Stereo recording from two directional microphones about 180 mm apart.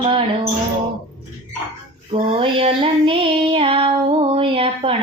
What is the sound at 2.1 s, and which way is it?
Child singing, 30° right (ahead or behind).